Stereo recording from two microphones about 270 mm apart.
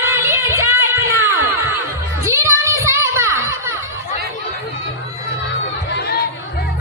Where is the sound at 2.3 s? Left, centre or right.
Centre.